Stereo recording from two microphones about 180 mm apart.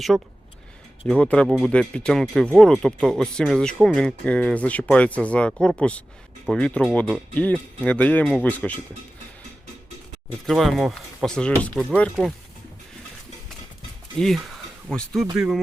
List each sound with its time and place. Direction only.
0.1 s speech: 5° right (ahead or behind)
10.4 s speech: centre (ahead or behind)
14.2 s speech: centre (ahead or behind)